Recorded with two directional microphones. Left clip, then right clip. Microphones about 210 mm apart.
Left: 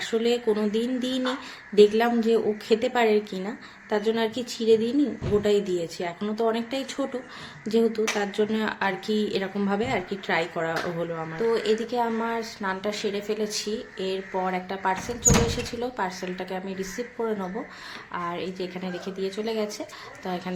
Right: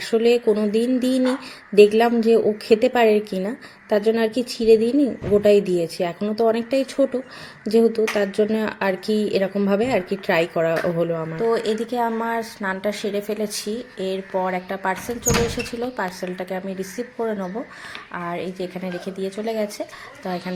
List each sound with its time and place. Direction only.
0.0 s speech: 25° right (ahead or behind)
18.1 s speech: 20° right (ahead or behind)